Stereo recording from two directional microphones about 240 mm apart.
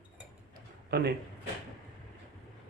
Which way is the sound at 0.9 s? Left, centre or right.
Right.